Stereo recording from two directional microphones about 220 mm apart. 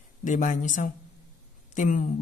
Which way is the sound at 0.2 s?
35° left (ahead or behind).